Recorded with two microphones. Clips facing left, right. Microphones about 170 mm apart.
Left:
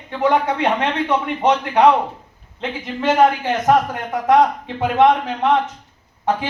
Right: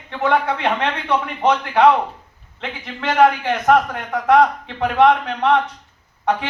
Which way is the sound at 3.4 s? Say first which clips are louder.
Even; 20° left (ahead or behind).